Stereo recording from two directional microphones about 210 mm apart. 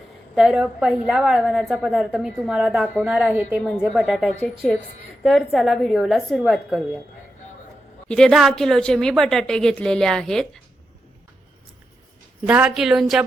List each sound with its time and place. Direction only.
0.3 s a woman's voice: centre (ahead or behind)
8.0 s a woman's voice: 5° left (ahead or behind)
12.5 s a woman's voice: 5° right (ahead or behind)